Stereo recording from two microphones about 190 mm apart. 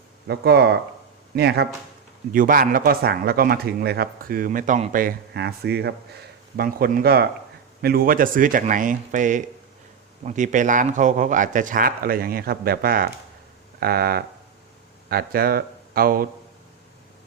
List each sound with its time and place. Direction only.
0.3 s speech: 60° right (ahead or behind)
2.3 s speech: 45° right (ahead or behind)